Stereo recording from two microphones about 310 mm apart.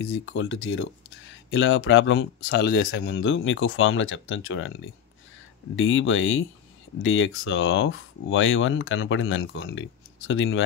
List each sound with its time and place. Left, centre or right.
0.0 s speech: left